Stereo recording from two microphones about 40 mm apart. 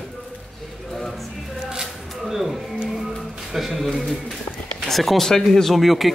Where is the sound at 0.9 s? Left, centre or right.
Centre.